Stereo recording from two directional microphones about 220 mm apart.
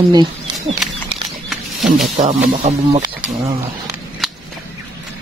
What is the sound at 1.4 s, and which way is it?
Wild animals, centre (ahead or behind).